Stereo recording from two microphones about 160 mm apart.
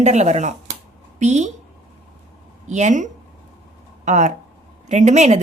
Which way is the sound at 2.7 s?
50° right (ahead or behind).